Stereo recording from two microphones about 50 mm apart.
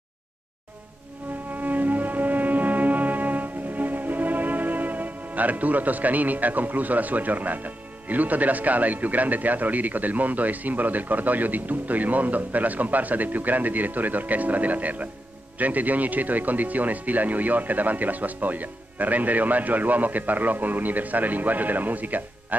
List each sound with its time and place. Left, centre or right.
1.5 s music: right
15.5 s a man's voice: right